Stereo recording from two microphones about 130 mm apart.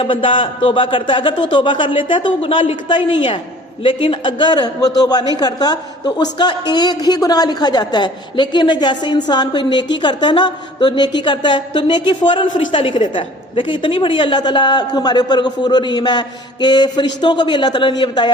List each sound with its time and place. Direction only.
0.0 s a man's voice: 40° left (ahead or behind)